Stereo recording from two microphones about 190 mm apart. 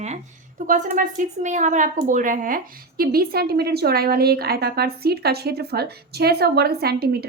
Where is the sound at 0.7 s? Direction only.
40° right (ahead or behind).